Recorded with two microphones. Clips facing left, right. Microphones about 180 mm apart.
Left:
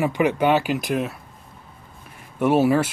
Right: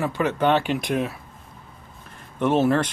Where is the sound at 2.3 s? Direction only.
10° left (ahead or behind).